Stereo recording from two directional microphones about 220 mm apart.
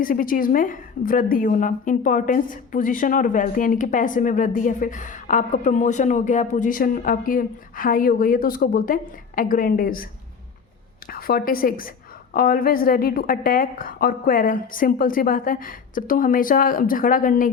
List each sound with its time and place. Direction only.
0.0 s a woman's voice: 40° left (ahead or behind)
11.1 s a woman's voice: 45° left (ahead or behind)